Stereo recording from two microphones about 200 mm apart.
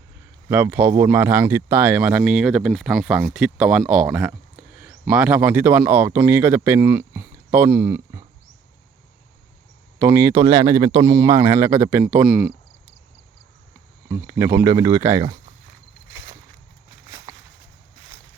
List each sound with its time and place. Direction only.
0.4 s speech: 10° right (ahead or behind)
10.0 s speech: 10° right (ahead or behind)
14.1 s speech: 15° right (ahead or behind)
16.1 s a sound: 15° right (ahead or behind)